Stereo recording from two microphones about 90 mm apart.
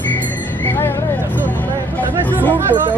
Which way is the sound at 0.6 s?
25° left (ahead or behind).